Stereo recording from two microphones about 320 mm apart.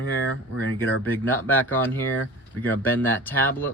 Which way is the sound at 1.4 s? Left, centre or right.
Centre.